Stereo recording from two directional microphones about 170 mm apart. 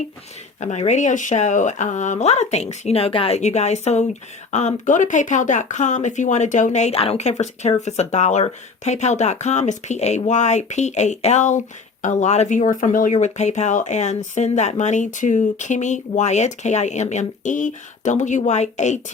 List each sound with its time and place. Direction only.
0.6 s speech: 45° left (ahead or behind)